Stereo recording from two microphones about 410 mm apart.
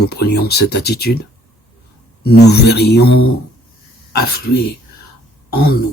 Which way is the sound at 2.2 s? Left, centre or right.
Left.